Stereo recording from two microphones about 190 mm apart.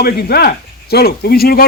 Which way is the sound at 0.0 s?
55° left (ahead or behind).